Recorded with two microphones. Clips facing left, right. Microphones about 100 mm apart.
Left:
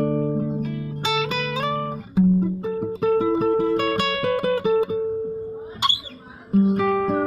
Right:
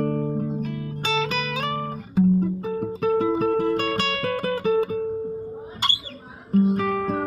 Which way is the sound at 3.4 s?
20° left (ahead or behind).